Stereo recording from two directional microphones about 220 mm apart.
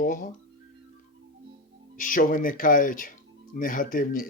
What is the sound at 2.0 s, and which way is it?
Speech, 40° left (ahead or behind).